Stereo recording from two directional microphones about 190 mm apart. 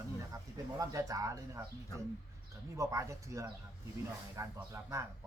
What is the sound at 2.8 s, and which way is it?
Speech, 15° right (ahead or behind).